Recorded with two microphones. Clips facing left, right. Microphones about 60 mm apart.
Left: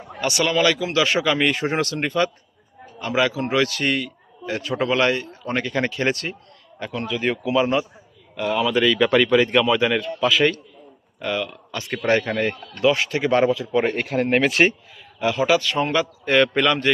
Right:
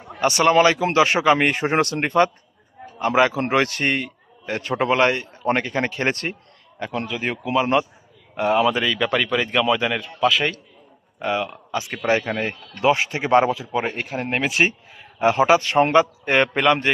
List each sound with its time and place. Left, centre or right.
0.2 s a man's voice: right
8.7 s speech: centre
11.2 s speech: right
11.9 s a man's voice: centre
12.8 s speech: right
13.7 s speech: centre
14.7 s a man's voice: right